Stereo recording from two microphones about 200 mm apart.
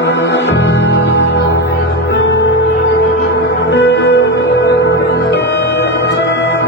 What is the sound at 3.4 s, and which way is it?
Music, 60° left (ahead or behind).